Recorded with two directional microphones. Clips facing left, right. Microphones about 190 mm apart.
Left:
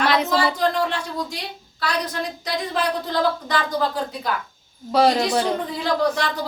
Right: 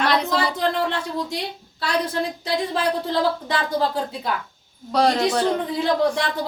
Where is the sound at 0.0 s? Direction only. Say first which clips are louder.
Left 1 dB; centre (ahead or behind).